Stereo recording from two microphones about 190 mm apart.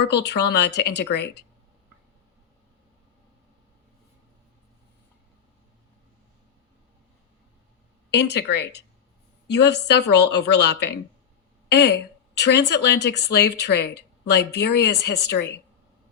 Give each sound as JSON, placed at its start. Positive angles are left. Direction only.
{"t": 0.0, "sound": "speech", "side_deg": 60}
{"t": 8.1, "sound": "speech", "side_deg": 60}